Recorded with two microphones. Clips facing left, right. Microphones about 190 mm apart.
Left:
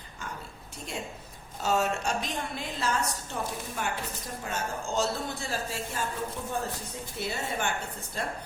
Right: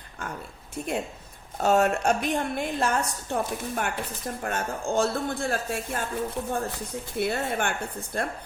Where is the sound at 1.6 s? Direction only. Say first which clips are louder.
Right 6 dB; 60° right (ahead or behind).